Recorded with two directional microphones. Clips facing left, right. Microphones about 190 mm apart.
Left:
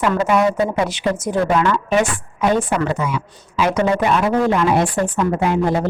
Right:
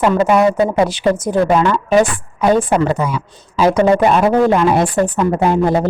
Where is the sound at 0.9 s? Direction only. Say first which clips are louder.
Right 5 dB; 30° right (ahead or behind).